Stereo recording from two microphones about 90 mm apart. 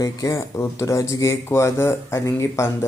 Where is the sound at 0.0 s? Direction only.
35° left (ahead or behind).